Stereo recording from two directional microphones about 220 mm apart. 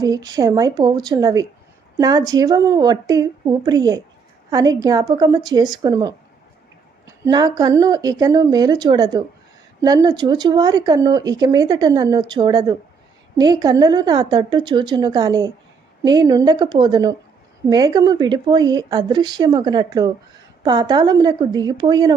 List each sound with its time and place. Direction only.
0.0 s speech: 15° right (ahead or behind)